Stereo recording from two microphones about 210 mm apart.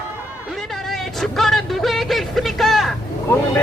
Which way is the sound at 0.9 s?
Centre (ahead or behind).